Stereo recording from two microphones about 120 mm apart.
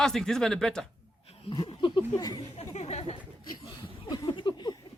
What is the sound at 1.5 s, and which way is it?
Speech, 45° left (ahead or behind).